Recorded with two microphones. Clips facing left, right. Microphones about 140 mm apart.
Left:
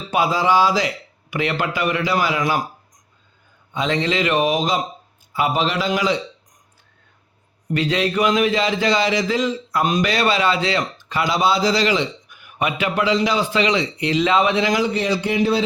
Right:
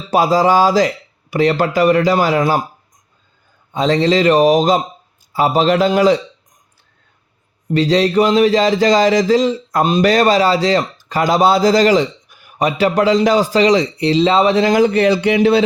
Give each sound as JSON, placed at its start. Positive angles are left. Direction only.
{"t": 0.1, "sound": "speech", "side_deg": -40}
{"t": 3.7, "sound": "a man's voice", "side_deg": -40}
{"t": 7.7, "sound": "speech", "side_deg": -35}
{"t": 10.1, "sound": "speech", "side_deg": -40}